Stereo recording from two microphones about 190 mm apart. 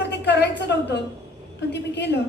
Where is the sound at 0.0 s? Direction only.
60° left (ahead or behind).